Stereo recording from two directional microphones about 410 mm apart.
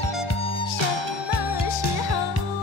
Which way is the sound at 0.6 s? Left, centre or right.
Left.